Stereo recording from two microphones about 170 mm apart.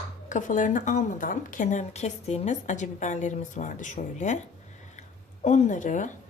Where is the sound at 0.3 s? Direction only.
50° left (ahead or behind).